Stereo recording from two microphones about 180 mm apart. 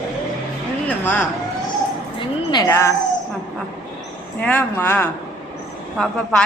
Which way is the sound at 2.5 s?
20° left (ahead or behind).